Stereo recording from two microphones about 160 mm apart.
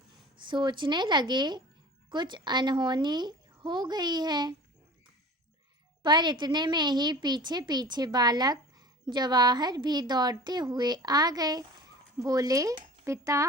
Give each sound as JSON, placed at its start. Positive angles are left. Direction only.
{"t": 0.4, "sound": "a woman's voice", "side_deg": -30}
{"t": 6.0, "sound": "a woman's voice", "side_deg": -25}